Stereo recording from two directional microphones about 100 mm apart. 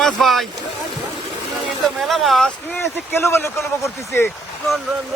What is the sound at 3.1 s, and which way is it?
Speech, 25° left (ahead or behind).